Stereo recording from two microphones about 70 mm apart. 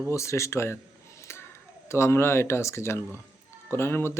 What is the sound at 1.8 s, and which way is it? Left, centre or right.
Speech, left.